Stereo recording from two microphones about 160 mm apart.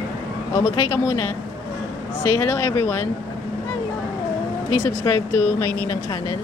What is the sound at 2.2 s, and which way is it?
Speech, 20° left (ahead or behind).